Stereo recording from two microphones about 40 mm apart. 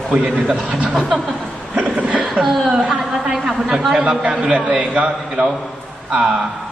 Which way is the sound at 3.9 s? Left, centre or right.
Right.